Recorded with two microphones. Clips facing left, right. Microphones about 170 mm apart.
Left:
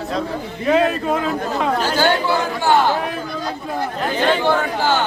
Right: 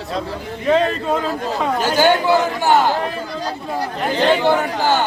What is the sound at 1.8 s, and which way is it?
Speech, 15° right (ahead or behind).